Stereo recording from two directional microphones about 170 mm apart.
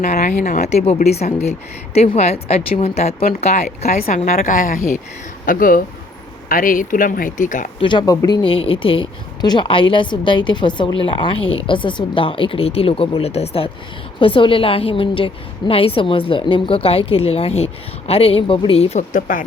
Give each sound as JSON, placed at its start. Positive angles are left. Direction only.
{"t": 0.1, "sound": "speech", "side_deg": 45}
{"t": 0.9, "sound": "speech", "side_deg": 40}
{"t": 3.8, "sound": "a woman's voice", "side_deg": 60}
{"t": 7.8, "sound": "speech", "side_deg": 25}